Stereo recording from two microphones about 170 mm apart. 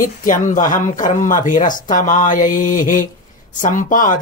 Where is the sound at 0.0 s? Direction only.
50° left (ahead or behind).